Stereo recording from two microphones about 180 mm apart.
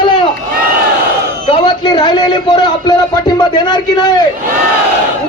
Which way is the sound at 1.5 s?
25° left (ahead or behind).